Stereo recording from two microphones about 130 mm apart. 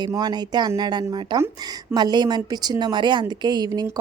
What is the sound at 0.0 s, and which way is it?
Speech, 35° right (ahead or behind).